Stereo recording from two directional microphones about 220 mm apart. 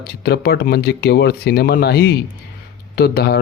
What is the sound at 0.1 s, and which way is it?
Speech, 45° left (ahead or behind).